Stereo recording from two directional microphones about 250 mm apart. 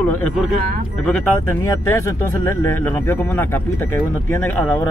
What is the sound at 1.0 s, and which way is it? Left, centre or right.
Speech, centre.